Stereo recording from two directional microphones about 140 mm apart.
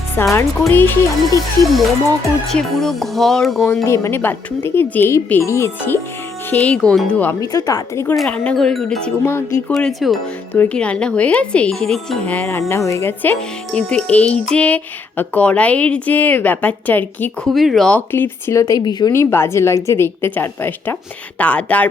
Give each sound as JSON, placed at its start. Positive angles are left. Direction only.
{"t": 0.2, "sound": "speech", "side_deg": 15}
{"t": 2.5, "sound": "speech", "side_deg": 0}
{"t": 3.8, "sound": "speech", "side_deg": 20}
{"t": 7.4, "sound": "a woman's voice", "side_deg": 25}
{"t": 8.1, "sound": "speech", "side_deg": 5}
{"t": 9.2, "sound": "speech", "side_deg": 20}
{"t": 9.7, "sound": "speech", "side_deg": 0}
{"t": 10.5, "sound": "speech", "side_deg": 10}
{"t": 17.5, "sound": "speech", "side_deg": 0}
{"t": 18.6, "sound": "a woman's voice", "side_deg": 30}
{"t": 19.1, "sound": "speech", "side_deg": 20}